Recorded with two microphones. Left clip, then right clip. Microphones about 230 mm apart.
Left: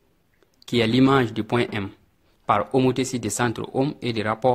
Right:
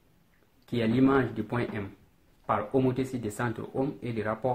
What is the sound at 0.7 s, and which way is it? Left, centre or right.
Speech, left.